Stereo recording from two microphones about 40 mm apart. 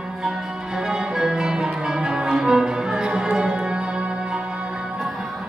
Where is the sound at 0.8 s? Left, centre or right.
Centre.